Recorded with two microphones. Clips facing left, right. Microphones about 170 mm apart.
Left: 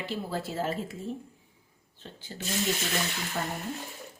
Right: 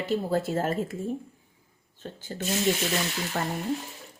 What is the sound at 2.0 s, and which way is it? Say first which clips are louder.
Speech: right 7 dB; 45° right (ahead or behind).